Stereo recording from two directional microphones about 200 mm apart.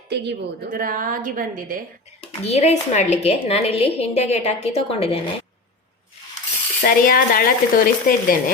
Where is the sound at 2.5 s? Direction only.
30° left (ahead or behind).